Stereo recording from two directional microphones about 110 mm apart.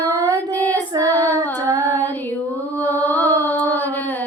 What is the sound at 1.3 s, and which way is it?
Singing, 30° right (ahead or behind).